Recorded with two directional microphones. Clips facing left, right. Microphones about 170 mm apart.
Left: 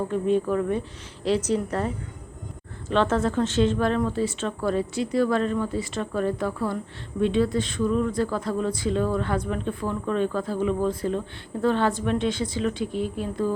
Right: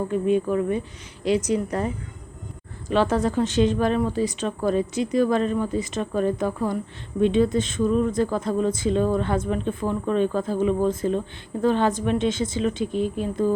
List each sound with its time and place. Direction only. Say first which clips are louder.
0.1 s speech: right 2 dB; 5° right (ahead or behind)
1.5 s speech: right 1 dB; 10° right (ahead or behind)
2.9 s speech: right 1 dB; 10° right (ahead or behind)